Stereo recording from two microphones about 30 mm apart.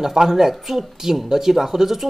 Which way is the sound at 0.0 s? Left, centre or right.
Centre.